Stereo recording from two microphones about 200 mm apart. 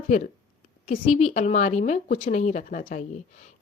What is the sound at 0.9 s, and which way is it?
A woman's voice, 35° left (ahead or behind).